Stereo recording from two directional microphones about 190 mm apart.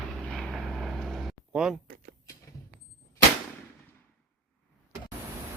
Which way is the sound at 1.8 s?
45° right (ahead or behind).